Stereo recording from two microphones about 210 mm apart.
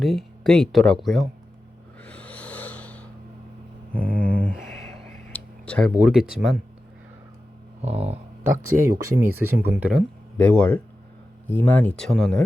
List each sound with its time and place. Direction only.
0.0 s speech: centre (ahead or behind)
2.0 s snort: 5° left (ahead or behind)
3.9 s a sound: 40° right (ahead or behind)
5.3 s a sound: 5° left (ahead or behind)
6.0 s speech: 5° right (ahead or behind)
7.8 s speech: 30° right (ahead or behind)
8.8 s speech: 10° right (ahead or behind)
10.3 s speech: 5° left (ahead or behind)